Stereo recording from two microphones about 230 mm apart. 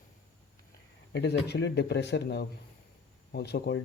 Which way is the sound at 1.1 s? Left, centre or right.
Left.